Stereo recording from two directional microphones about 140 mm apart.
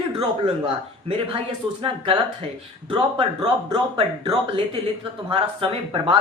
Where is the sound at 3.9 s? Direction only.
40° right (ahead or behind).